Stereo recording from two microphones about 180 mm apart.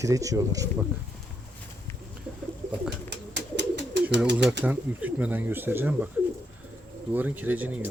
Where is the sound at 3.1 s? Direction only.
75° right (ahead or behind).